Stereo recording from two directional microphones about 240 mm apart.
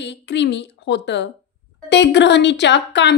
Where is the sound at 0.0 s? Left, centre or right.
Left.